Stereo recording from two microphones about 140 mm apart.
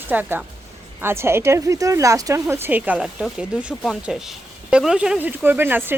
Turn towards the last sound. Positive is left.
turn(degrees=-15)  # may be behind; listen again after turning